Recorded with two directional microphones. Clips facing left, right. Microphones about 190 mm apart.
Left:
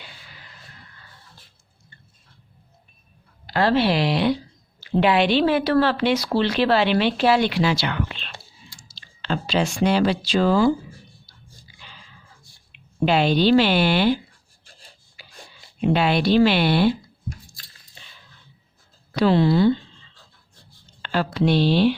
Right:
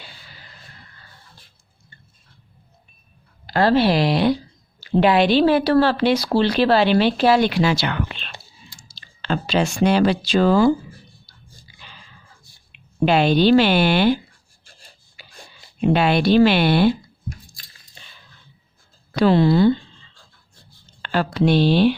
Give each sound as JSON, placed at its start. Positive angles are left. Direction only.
{"t": 3.4, "sound": "speech", "side_deg": -40}
{"t": 13.1, "sound": "speech", "side_deg": -55}
{"t": 14.6, "sound": "a sound", "side_deg": 0}
{"t": 15.2, "sound": "a sound", "side_deg": -50}
{"t": 15.8, "sound": "speech", "side_deg": -55}
{"t": 19.1, "sound": "speech", "side_deg": -50}
{"t": 21.0, "sound": "speech", "side_deg": -55}